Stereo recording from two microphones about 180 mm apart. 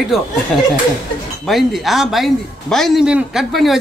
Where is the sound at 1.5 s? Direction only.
Centre (ahead or behind).